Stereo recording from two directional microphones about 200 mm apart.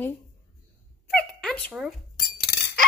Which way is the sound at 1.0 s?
5° left (ahead or behind).